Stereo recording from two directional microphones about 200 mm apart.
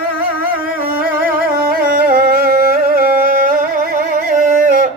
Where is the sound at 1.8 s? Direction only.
45° right (ahead or behind).